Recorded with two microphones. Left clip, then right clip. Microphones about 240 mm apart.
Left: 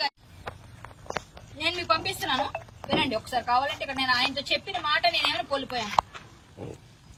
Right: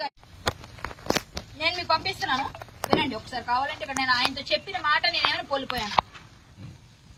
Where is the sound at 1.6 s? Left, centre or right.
Centre.